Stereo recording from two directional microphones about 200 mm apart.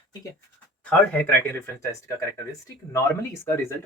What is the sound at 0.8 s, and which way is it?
Speech, 5° left (ahead or behind).